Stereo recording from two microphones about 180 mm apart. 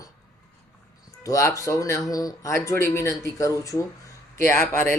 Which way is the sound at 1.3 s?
15° left (ahead or behind).